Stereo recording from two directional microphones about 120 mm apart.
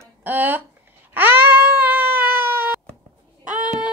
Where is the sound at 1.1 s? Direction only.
15° right (ahead or behind).